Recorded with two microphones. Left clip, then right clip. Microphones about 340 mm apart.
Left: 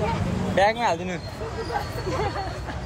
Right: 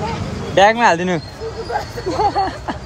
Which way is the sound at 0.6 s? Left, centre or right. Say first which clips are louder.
Right 9 dB; right.